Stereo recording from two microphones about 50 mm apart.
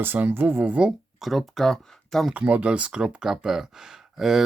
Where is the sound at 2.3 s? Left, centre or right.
Right.